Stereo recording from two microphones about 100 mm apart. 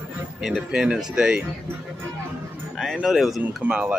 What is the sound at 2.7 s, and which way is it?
Speech, centre (ahead or behind).